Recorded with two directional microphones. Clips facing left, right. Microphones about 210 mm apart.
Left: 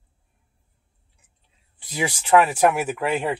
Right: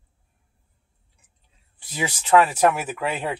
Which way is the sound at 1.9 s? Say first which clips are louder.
Left 1 dB; 15° left (ahead or behind).